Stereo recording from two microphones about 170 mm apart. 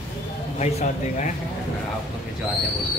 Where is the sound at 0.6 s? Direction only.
45° left (ahead or behind).